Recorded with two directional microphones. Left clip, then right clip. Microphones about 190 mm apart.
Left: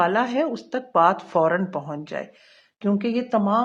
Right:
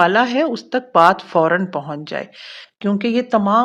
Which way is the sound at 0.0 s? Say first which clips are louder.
Right 6 dB; 25° right (ahead or behind).